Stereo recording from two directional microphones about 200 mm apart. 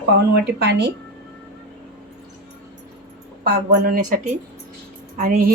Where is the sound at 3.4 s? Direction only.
50° right (ahead or behind).